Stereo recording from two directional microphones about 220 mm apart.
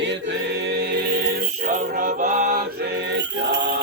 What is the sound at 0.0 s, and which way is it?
Music, 55° right (ahead or behind).